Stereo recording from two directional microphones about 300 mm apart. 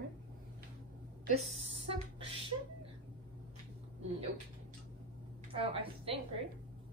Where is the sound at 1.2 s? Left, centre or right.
Right.